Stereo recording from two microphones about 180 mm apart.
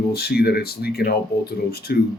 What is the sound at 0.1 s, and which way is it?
Speech, 60° left (ahead or behind).